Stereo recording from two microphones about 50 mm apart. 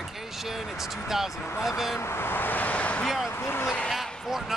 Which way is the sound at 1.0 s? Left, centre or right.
Centre.